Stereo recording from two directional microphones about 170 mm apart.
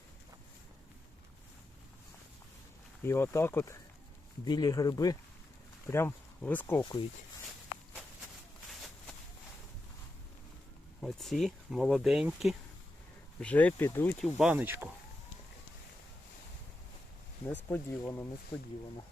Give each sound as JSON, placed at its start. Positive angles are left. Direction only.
{"t": 3.0, "sound": "speech", "side_deg": 15}
{"t": 11.0, "sound": "speech", "side_deg": 0}
{"t": 13.4, "sound": "speech", "side_deg": 10}
{"t": 14.3, "sound": "speech", "side_deg": -10}
{"t": 17.5, "sound": "speech", "side_deg": 10}